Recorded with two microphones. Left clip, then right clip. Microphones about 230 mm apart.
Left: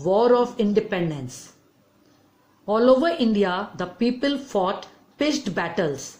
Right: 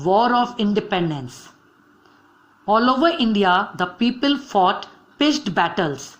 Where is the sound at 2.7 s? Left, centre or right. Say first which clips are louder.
Right 1 dB; centre.